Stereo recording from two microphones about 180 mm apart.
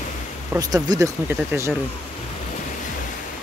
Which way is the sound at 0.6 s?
20° right (ahead or behind).